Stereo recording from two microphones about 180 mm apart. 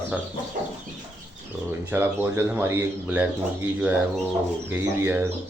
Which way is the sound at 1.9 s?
10° right (ahead or behind).